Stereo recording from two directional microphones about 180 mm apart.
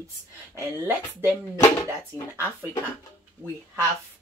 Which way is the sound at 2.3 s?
15° right (ahead or behind).